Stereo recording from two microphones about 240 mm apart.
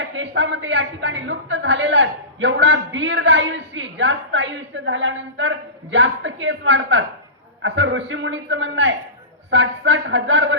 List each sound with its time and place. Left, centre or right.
0.0 s a woman's voice: right